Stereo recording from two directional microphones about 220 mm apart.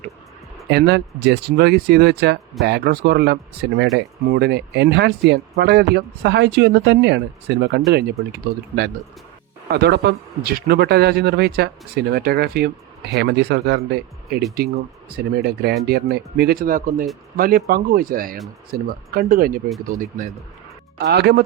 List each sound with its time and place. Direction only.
0.7 s speech: 45° right (ahead or behind)
9.6 s speech: 45° right (ahead or behind)
21.0 s speech: 50° right (ahead or behind)